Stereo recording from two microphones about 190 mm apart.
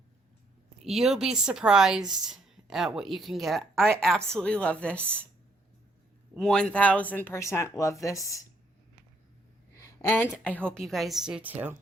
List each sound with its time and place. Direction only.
0.9 s a woman's voice: centre (ahead or behind)
6.3 s speech: 5° left (ahead or behind)
9.7 s a woman's voice: 15° left (ahead or behind); by 11.8 s 10° right (ahead or behind)